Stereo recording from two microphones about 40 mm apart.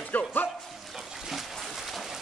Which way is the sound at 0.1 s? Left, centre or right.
Left.